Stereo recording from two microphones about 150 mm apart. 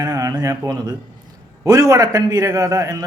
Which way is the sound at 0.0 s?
25° right (ahead or behind).